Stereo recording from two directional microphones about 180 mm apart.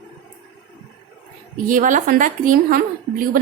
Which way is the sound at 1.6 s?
45° right (ahead or behind).